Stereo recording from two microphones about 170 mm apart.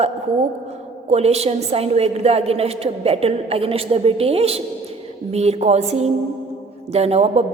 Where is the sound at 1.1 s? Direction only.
40° right (ahead or behind).